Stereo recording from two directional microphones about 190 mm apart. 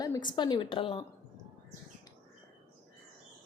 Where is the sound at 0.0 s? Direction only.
20° left (ahead or behind).